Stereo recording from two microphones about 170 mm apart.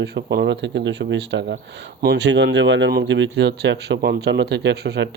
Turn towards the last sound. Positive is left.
turn(degrees=-85)